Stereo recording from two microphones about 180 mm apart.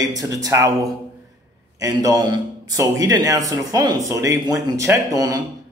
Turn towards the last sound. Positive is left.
turn(degrees=-20)  # may be behind; listen again after turning